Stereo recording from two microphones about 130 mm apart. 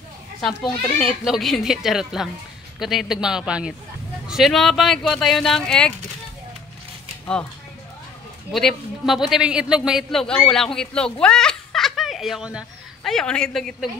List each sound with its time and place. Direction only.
0.4 s speech: centre (ahead or behind)
8.5 s a man's voice: centre (ahead or behind)
13.1 s speech: 5° left (ahead or behind)